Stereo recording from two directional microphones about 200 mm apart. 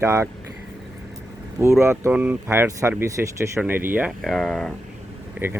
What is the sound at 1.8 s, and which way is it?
Speech, 15° right (ahead or behind).